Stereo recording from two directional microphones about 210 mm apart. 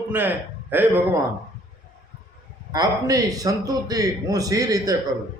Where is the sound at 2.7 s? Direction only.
15° right (ahead or behind).